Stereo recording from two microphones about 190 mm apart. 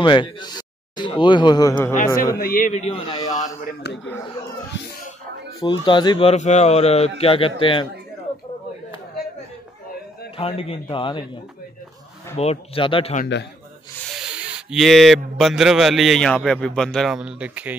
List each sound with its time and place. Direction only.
0.0 s speech: 25° left (ahead or behind)
2.3 s a man's voice: 50° left (ahead or behind)
3.1 s speech: 20° left (ahead or behind)
3.6 s a man's voice: 65° left (ahead or behind)
5.6 s speech: 25° left (ahead or behind)
10.3 s speech: 30° left (ahead or behind)
12.4 s speech: 30° left (ahead or behind)
14.1 s a man's voice: 5° right (ahead or behind)